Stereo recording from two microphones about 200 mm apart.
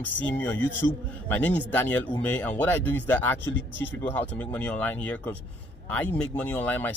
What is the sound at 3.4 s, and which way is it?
Speech, 65° left (ahead or behind).